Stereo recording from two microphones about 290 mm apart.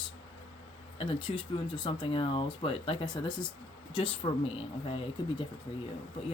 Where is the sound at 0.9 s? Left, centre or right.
Centre.